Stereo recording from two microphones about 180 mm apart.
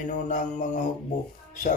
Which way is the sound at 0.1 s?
45° left (ahead or behind).